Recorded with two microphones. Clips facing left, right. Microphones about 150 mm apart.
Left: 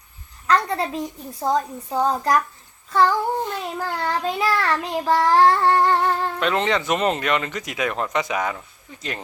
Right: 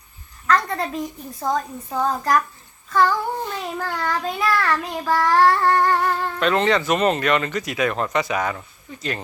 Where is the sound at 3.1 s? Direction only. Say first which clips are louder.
Left 2 dB; 15° left (ahead or behind).